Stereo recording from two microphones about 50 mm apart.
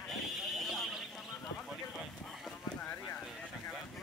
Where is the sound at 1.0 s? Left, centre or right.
Centre.